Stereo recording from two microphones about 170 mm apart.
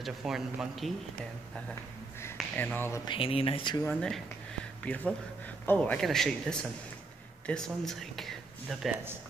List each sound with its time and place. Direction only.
0.0 s speech: 5° right (ahead or behind)
2.3 s speech: 10° left (ahead or behind)
3.1 s speech: 30° left (ahead or behind)
3.8 s speech: 5° left (ahead or behind)